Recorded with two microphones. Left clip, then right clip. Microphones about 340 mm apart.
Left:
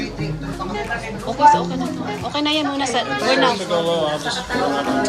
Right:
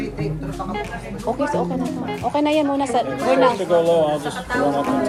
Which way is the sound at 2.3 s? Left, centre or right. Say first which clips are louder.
Right 2 dB; centre.